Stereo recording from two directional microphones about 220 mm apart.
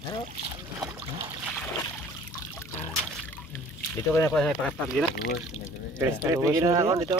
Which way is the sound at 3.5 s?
10° left (ahead or behind).